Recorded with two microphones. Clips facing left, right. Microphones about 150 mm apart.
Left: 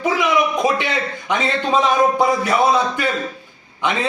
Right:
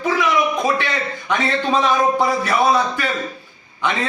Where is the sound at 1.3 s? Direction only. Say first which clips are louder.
Even; 20° left (ahead or behind).